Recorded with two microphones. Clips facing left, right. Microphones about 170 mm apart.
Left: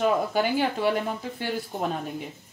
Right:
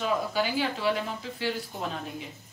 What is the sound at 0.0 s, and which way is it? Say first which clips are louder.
Speech: left 4 dB; 50° left (ahead or behind).